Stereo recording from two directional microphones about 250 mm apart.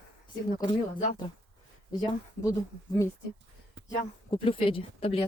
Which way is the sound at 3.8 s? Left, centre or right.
Left.